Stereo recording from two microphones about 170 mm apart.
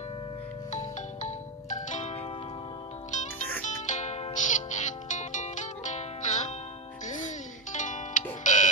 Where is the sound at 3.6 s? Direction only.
45° left (ahead or behind).